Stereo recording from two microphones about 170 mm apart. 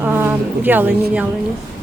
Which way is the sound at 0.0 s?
10° right (ahead or behind).